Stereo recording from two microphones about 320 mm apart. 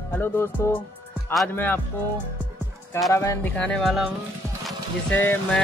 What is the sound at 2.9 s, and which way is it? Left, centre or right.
Speech, centre.